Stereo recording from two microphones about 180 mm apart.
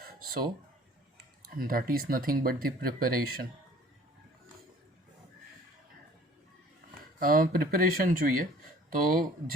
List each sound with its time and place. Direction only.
0.0 s a sound: 55° right (ahead or behind)
1.5 s speech: 55° right (ahead or behind)
7.2 s speech: 50° right (ahead or behind)